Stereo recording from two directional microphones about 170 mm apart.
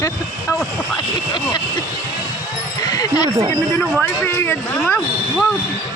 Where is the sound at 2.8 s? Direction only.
20° left (ahead or behind).